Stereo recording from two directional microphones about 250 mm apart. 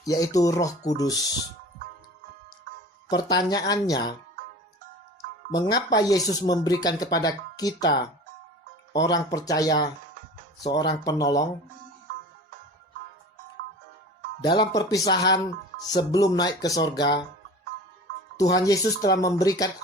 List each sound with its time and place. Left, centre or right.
0.0 s speech: centre
3.1 s speech: centre
5.5 s speech: centre
14.4 s speech: centre
18.3 s speech: centre